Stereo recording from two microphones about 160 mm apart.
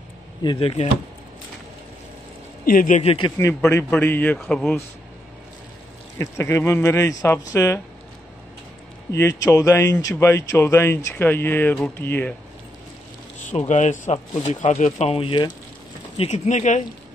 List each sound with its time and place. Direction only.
0.4 s speech: 30° left (ahead or behind)
2.6 s a man's voice: 60° left (ahead or behind)
3.0 s speech: 35° left (ahead or behind)
3.3 s speech: 15° left (ahead or behind)
6.1 s speech: 15° left (ahead or behind)
9.4 s speech: 20° left (ahead or behind)
13.5 s speech: 50° left (ahead or behind); by 15.5 s 30° left (ahead or behind)
16.2 s speech: 45° left (ahead or behind)